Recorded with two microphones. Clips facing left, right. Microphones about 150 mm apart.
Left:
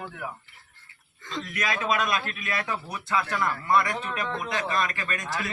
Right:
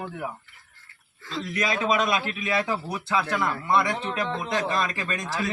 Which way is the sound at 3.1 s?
15° right (ahead or behind).